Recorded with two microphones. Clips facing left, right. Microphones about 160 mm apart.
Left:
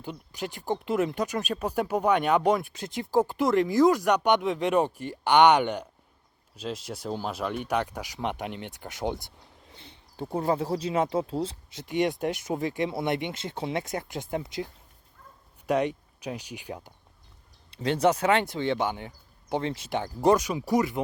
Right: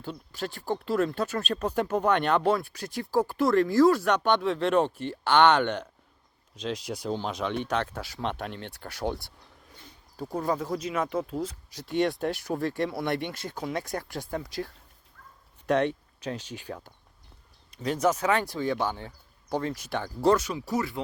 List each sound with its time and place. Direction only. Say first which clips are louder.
0.0 s speech: even; 15° left (ahead or behind)
17.8 s speech: left 2 dB; 30° left (ahead or behind)